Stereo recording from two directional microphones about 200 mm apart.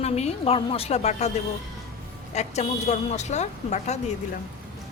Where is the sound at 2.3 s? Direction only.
35° left (ahead or behind).